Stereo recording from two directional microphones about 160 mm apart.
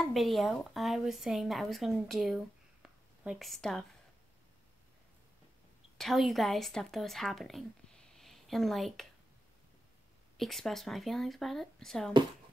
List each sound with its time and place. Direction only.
0.0 s a woman's voice: centre (ahead or behind)
5.9 s a woman's voice: centre (ahead or behind)
10.3 s a woman's voice: centre (ahead or behind)